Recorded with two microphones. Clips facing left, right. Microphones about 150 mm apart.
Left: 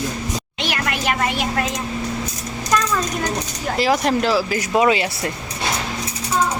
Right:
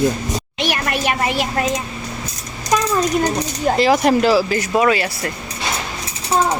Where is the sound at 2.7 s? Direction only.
20° right (ahead or behind).